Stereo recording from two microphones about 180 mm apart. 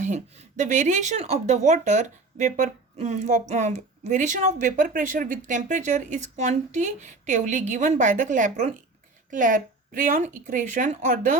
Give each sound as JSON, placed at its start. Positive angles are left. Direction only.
{"t": 0.0, "sound": "speech", "side_deg": -40}